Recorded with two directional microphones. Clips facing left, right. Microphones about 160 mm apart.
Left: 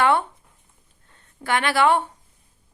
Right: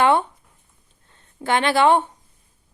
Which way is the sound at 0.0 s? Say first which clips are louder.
Right 2 dB; 20° right (ahead or behind).